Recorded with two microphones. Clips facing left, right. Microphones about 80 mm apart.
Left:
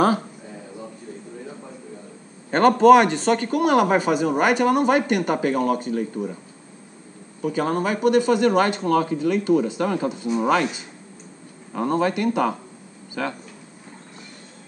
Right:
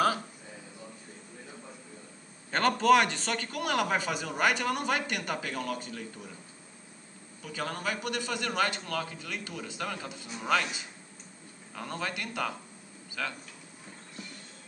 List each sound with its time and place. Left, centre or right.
2.5 s speech: centre
7.4 s speech: left
11.7 s speech: left